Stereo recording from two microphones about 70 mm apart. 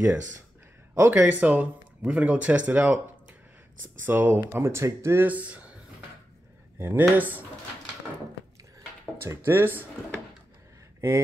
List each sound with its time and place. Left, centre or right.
0.9 s speech: right
4.0 s speech: right
4.5 s speech: right
5.2 s speech: right
6.8 s speech: right
9.2 s speech: right